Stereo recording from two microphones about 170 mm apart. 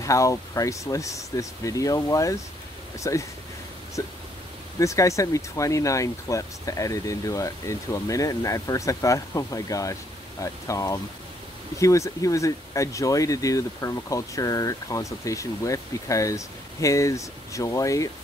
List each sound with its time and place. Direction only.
0.0 s speech: 20° left (ahead or behind)
4.7 s speech: 20° left (ahead or behind)